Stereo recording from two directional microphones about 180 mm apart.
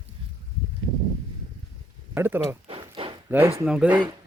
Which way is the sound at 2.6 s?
30° right (ahead or behind).